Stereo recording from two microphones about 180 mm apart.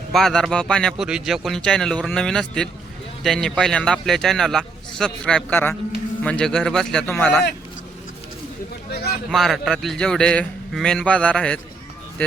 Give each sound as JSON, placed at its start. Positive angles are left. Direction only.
{"t": 0.1, "sound": "a man's voice", "side_deg": 0}
{"t": 8.9, "sound": "a sound", "side_deg": 65}
{"t": 9.3, "sound": "a man's voice", "side_deg": 0}